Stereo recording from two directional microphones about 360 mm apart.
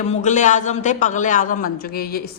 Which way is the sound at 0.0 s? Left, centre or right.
Centre.